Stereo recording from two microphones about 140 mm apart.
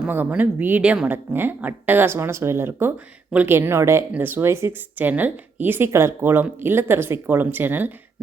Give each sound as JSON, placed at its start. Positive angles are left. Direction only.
{"t": 0.1, "sound": "speech", "side_deg": -15}